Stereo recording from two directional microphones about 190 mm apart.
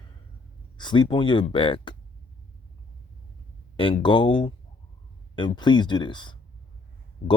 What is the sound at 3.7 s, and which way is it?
Speech, 25° left (ahead or behind).